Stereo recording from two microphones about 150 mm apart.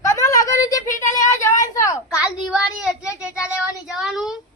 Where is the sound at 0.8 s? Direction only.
55° left (ahead or behind).